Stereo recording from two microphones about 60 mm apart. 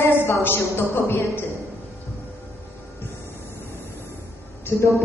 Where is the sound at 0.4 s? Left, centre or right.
Left.